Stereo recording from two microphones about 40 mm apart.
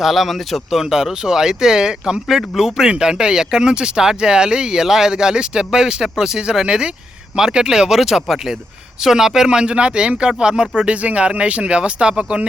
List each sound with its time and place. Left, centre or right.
0.0 s speech: centre
10.9 s speech: right